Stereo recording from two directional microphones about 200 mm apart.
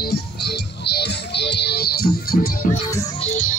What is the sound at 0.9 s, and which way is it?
Music, 55° left (ahead or behind).